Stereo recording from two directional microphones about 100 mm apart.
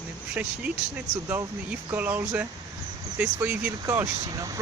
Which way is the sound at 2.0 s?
15° right (ahead or behind).